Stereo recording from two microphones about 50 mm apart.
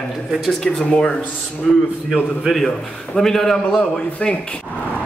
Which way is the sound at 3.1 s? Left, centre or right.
Centre.